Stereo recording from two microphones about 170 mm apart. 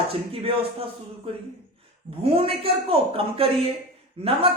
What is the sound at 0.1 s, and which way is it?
Speech, 35° right (ahead or behind).